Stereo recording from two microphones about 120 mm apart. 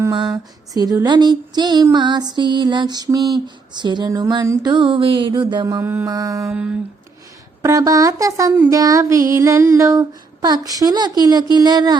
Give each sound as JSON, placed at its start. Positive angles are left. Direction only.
{"t": 0.7, "sound": "a sound", "side_deg": -30}
{"t": 5.8, "sound": "mantra", "side_deg": -20}
{"t": 6.1, "sound": "female singing", "side_deg": -30}
{"t": 6.5, "sound": "mantra", "side_deg": -10}
{"t": 7.6, "sound": "female singing", "side_deg": -30}
{"t": 11.2, "sound": "a sound", "side_deg": -35}